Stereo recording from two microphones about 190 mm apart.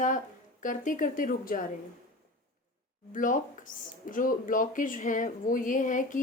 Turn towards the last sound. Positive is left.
turn(degrees=45)  # may be behind; listen again after turning